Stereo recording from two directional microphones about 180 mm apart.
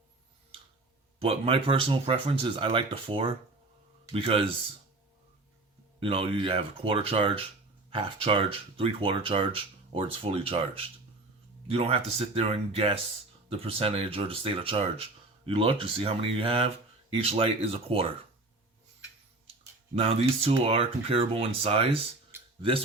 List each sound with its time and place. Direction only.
1.2 s speech: 30° right (ahead or behind)
6.0 s speech: 30° right (ahead or behind)
20.0 s speech: 35° right (ahead or behind)